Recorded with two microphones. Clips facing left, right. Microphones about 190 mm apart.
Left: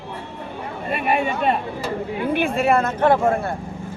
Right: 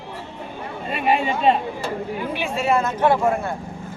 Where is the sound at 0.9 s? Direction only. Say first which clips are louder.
Right 1 dB; 60° left (ahead or behind).